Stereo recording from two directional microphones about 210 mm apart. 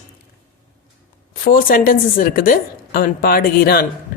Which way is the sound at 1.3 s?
40° left (ahead or behind).